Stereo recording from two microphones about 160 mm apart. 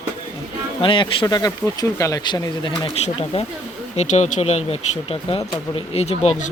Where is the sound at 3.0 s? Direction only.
40° left (ahead or behind).